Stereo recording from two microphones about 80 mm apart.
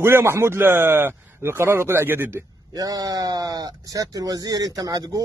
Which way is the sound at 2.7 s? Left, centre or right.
Right.